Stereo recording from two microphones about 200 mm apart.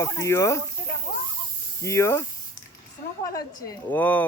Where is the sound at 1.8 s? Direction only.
15° left (ahead or behind).